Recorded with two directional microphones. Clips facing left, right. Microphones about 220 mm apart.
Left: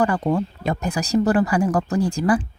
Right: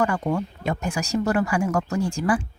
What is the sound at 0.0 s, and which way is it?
Speech, 35° left (ahead or behind).